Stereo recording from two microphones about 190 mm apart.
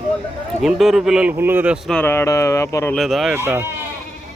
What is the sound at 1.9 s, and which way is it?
Speech, 10° left (ahead or behind).